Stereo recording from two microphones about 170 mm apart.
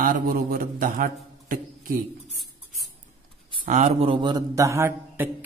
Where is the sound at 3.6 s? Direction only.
40° right (ahead or behind); by 5.2 s 15° right (ahead or behind).